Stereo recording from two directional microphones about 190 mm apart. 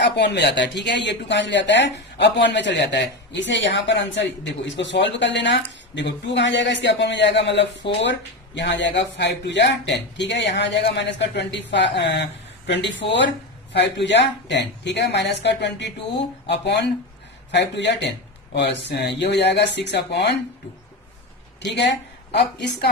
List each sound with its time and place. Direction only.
0.0 s a woman's voice: 65° left (ahead or behind)
21.7 s a woman's voice: 65° left (ahead or behind)